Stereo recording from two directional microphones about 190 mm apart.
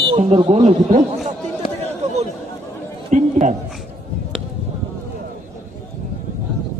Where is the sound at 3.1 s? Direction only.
40° right (ahead or behind).